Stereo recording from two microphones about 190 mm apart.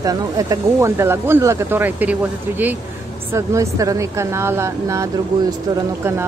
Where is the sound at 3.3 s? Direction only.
15° right (ahead or behind).